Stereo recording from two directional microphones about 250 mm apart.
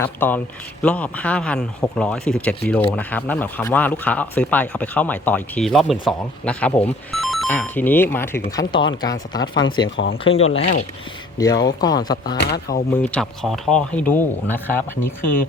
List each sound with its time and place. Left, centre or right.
0.0 s speech: centre
12.4 s speech: left
12.9 s speech: centre